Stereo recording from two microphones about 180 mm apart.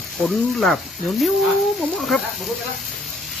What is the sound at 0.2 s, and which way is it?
Speech, centre (ahead or behind).